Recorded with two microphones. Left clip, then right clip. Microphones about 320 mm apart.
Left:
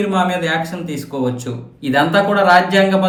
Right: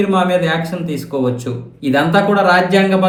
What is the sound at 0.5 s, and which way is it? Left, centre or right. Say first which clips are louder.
Speech: right 1 dB; left.